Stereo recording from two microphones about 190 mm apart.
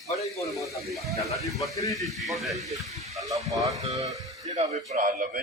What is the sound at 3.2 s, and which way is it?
Speech, 15° right (ahead or behind).